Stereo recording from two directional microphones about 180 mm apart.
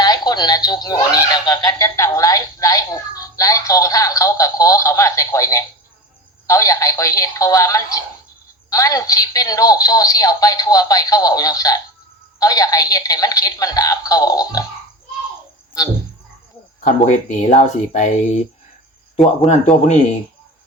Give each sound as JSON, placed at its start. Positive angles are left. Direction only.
{"t": 0.0, "sound": "speech", "side_deg": 20}
{"t": 16.8, "sound": "speech", "side_deg": 45}
{"t": 19.5, "sound": "a man's voice", "side_deg": 40}